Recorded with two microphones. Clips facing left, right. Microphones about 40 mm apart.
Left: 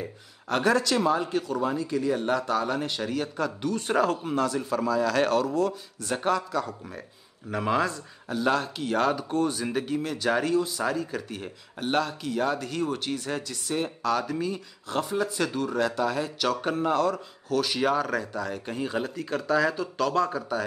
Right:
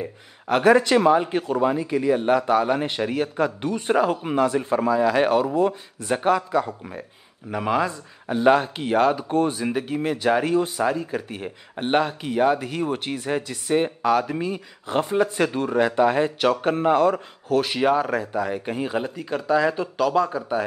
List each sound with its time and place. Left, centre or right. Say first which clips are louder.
0.0 s speech: right 5 dB; right
7.5 s speech: right 3 dB; centre
8.3 s speech: right 7 dB; right
9.9 s speech: right 6 dB; right
10.8 s speech: right 5 dB; right
17.7 s speech: right 5 dB; centre